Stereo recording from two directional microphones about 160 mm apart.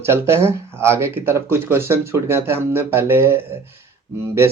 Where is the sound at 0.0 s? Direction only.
15° right (ahead or behind).